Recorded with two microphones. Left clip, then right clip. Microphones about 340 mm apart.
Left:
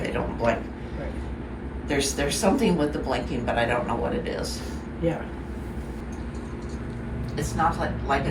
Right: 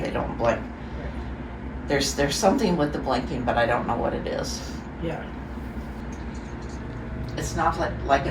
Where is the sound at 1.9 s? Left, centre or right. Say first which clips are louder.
Right 2 dB; centre.